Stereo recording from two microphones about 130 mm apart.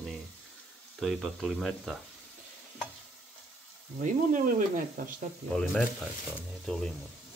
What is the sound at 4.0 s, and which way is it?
Speech, 85° right.